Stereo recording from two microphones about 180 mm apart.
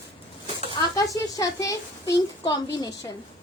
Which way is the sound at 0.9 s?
20° left (ahead or behind).